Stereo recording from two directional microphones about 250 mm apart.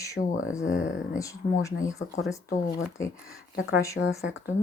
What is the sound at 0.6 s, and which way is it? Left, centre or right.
Speech, left.